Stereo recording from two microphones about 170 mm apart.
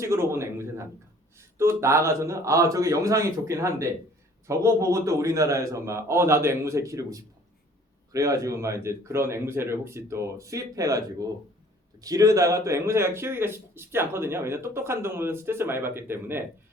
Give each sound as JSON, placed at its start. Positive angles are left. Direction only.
{"t": 0.0, "sound": "a man's voice", "side_deg": -15}